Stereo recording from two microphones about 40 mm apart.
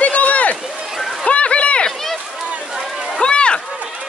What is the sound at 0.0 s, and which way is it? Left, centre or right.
Run, left.